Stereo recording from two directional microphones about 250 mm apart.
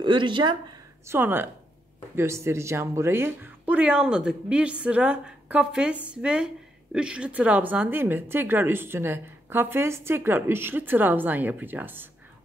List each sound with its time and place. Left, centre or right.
0.0 s a woman's voice: centre